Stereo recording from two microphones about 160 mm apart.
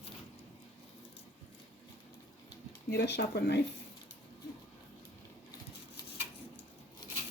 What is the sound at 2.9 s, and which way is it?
Speech, 90° left.